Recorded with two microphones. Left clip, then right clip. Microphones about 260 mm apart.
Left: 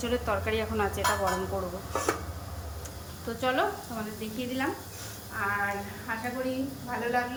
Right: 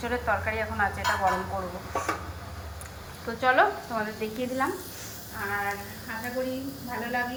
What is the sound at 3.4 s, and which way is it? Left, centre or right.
Speech, centre.